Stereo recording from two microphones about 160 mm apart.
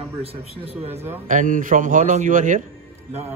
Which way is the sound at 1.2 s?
55° right (ahead or behind).